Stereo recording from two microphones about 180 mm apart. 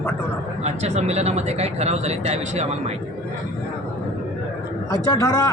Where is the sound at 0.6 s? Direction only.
40° right (ahead or behind).